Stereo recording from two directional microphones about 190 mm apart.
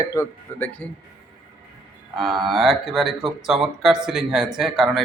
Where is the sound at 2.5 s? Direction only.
Centre (ahead or behind).